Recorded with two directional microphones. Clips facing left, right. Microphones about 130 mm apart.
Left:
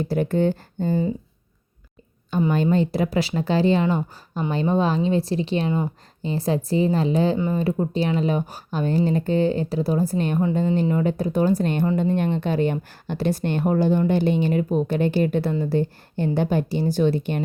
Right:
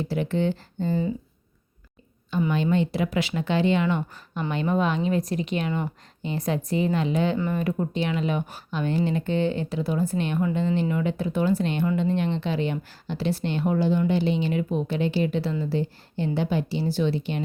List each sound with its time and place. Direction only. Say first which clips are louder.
0.0 s a woman's voice: left 4 dB; 45° left (ahead or behind)
2.5 s a woman's voice: left 3 dB; 40° left (ahead or behind)